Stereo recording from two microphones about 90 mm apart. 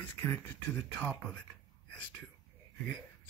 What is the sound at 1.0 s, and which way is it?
Speech, 15° left (ahead or behind).